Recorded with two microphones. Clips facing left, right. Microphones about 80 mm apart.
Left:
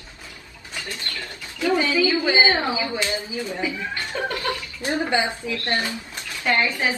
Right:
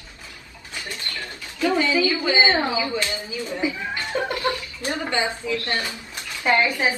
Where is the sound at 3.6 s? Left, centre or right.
Right.